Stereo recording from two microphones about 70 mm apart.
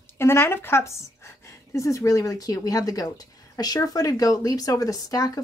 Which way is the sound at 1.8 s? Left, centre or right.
Left.